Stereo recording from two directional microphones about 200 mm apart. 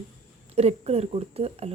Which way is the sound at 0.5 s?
30° right (ahead or behind).